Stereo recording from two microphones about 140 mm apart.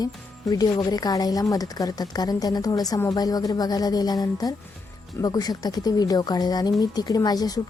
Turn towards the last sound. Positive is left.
turn(degrees=25)  # may be behind; listen again after turning